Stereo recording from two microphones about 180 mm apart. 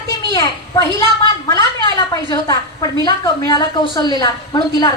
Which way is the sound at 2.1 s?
20° left (ahead or behind).